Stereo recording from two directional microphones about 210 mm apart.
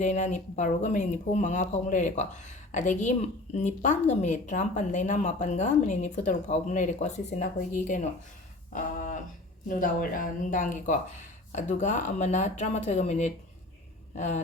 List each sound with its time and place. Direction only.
0.0 s speech: 35° left (ahead or behind)
8.7 s a sound: 35° left (ahead or behind)
9.6 s speech: 40° left (ahead or behind)